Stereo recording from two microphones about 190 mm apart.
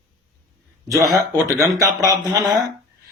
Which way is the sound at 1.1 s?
20° right (ahead or behind).